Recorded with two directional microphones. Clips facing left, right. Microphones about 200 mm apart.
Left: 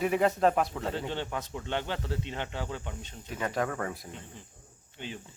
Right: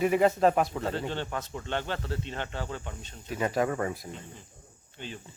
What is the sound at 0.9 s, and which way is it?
Speech, 15° left (ahead or behind).